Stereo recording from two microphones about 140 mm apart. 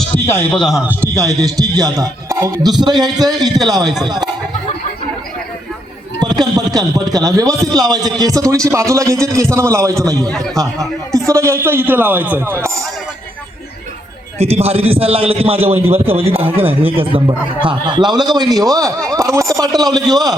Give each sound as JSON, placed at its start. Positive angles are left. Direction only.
{"t": 0.5, "sound": "a man's voice", "side_deg": 0}
{"t": 1.1, "sound": "music", "side_deg": -25}
{"t": 1.5, "sound": "a man's voice", "side_deg": -25}
{"t": 6.1, "sound": "a man's voice", "side_deg": -30}
{"t": 14.3, "sound": "a man's voice", "side_deg": -50}